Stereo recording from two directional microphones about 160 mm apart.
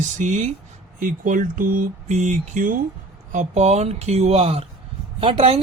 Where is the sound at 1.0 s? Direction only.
55° right (ahead or behind); by 5.6 s 40° right (ahead or behind).